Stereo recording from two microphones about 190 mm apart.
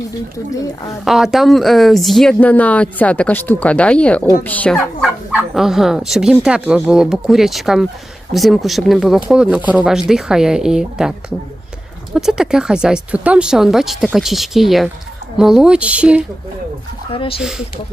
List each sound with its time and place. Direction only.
1.0 s speech: centre (ahead or behind)
12.1 s speech: 5° right (ahead or behind)
17.1 s speech: 30° left (ahead or behind)